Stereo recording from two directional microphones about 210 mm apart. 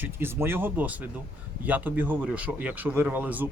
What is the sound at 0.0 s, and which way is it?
Speech, 10° right (ahead or behind).